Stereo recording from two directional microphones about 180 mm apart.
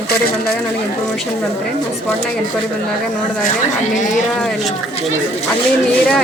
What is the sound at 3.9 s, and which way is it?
Speech, 45° left (ahead or behind).